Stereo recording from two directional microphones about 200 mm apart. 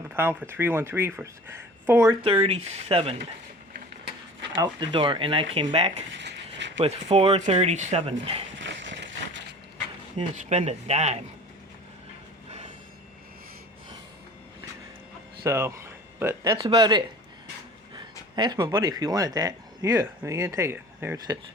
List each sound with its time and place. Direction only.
0.1 s speech: 10° right (ahead or behind)
2.2 s speech: 30° right (ahead or behind)
4.6 s speech: 25° right (ahead or behind)
6.1 s a sound: 60° right (ahead or behind)
6.7 s speech: 30° right (ahead or behind)
8.5 s a sound: 65° right (ahead or behind)
10.2 s speech: 35° right (ahead or behind)
15.4 s speech: 15° right (ahead or behind)